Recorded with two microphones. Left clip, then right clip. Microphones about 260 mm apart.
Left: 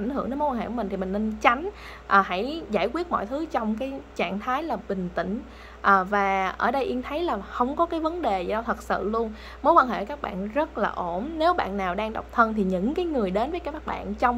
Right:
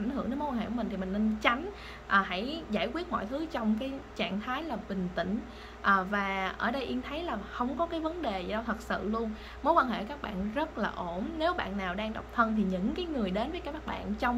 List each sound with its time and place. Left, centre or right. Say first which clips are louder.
0.1 s a woman's voice: left 9 dB; centre